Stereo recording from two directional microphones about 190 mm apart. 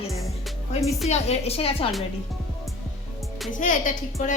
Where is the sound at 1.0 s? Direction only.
35° left (ahead or behind).